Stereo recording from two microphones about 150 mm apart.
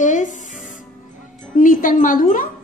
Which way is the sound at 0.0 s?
55° left (ahead or behind).